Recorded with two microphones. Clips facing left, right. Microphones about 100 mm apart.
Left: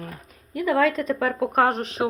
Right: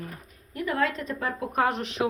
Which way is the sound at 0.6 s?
90° left.